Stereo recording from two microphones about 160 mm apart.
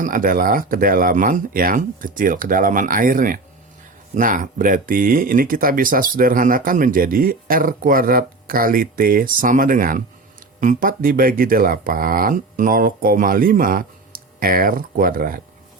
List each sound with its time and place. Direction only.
0.0 s speech: 55° right (ahead or behind)